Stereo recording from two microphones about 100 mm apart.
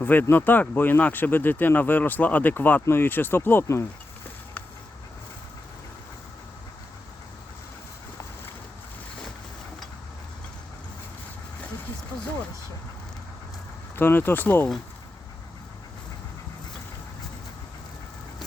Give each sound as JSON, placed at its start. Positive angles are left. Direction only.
{"t": 0.0, "sound": "speech", "side_deg": 20}
{"t": 13.9, "sound": "speech", "side_deg": 20}